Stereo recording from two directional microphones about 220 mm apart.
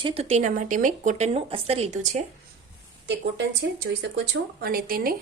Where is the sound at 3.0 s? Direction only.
55° right (ahead or behind).